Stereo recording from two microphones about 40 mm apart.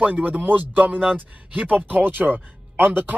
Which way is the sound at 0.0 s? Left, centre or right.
Right.